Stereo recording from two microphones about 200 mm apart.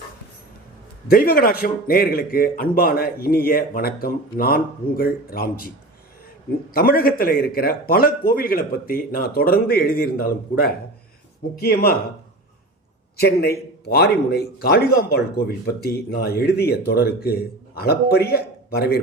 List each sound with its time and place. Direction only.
1.1 s a man's voice: 50° left (ahead or behind)
13.1 s a man's voice: 50° left (ahead or behind)